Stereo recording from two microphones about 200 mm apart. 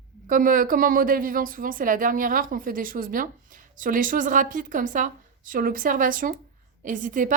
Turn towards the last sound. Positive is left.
turn(degrees=-40)  # may be behind; listen again after turning